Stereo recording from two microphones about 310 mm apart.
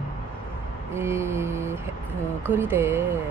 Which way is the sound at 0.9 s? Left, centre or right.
Centre.